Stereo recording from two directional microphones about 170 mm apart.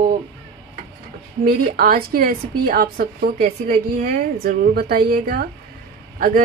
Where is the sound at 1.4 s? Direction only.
60° right (ahead or behind).